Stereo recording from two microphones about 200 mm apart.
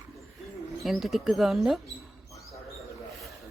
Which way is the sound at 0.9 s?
Centre (ahead or behind).